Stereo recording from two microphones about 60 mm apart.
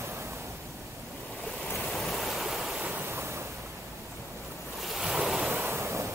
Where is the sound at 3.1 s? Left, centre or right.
Right.